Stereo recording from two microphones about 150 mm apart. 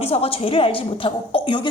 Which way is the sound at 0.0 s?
40° left (ahead or behind).